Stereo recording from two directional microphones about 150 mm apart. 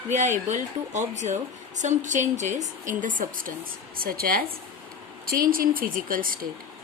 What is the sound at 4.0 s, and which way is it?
Speech, 80° right.